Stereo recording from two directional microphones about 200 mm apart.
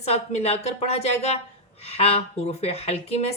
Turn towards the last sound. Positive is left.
turn(degrees=30)  # may be behind; listen again after turning